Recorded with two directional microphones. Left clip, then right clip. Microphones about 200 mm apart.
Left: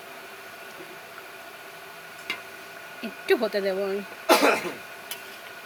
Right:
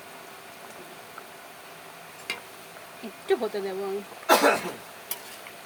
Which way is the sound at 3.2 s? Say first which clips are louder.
Left 3 dB; 50° left (ahead or behind).